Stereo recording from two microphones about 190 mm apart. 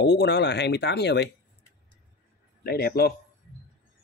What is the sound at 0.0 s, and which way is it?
Speech, 60° left (ahead or behind).